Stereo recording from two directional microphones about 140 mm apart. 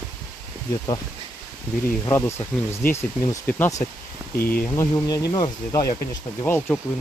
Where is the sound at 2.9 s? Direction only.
20° left (ahead or behind).